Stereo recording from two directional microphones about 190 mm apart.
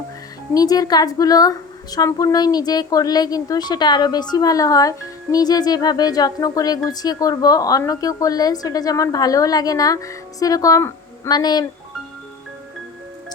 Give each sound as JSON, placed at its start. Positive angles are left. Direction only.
{"t": 0.5, "sound": "a woman's voice", "side_deg": 20}